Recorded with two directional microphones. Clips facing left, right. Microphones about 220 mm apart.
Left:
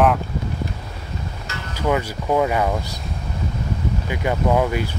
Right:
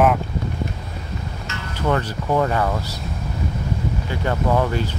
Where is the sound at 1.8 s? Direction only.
10° left (ahead or behind).